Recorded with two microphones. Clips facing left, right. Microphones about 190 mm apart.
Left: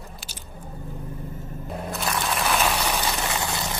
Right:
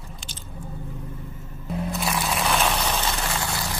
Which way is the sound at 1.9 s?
Centre (ahead or behind).